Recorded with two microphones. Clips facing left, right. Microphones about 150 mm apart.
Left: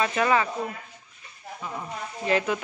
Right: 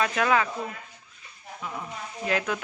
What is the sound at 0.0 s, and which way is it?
Speech, 5° left (ahead or behind).